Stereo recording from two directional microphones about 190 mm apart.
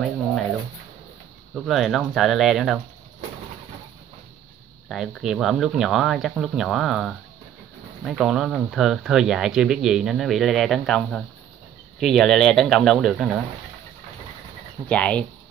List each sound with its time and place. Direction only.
0.0 s a sound: centre (ahead or behind)
1.5 s speech: centre (ahead or behind)
4.8 s speech: centre (ahead or behind)
14.9 s speech: 5° left (ahead or behind)